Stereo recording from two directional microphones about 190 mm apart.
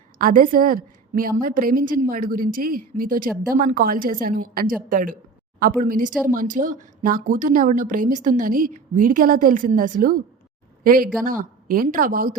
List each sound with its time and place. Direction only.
0.2 s a woman's voice: 45° right (ahead or behind)